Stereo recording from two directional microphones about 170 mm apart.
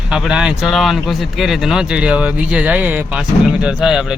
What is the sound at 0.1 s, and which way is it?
Speech, 5° right (ahead or behind).